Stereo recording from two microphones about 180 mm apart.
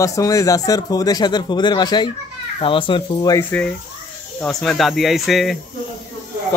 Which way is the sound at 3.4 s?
10° left (ahead or behind).